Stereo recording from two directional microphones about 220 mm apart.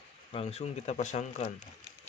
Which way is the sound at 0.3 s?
25° left (ahead or behind).